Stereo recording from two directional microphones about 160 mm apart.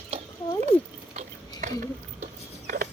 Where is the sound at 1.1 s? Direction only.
45° right (ahead or behind).